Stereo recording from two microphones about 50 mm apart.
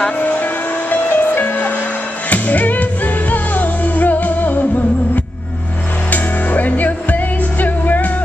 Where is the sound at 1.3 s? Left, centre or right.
Left.